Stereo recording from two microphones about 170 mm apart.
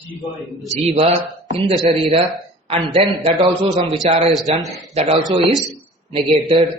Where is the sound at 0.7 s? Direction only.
40° right (ahead or behind).